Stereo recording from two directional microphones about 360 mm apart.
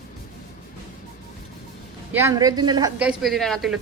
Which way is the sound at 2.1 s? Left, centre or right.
Centre.